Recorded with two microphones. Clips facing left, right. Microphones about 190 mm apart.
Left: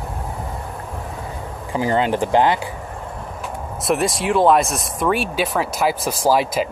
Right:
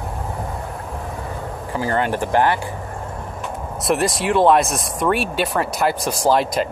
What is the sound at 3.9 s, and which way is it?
Speech, centre (ahead or behind).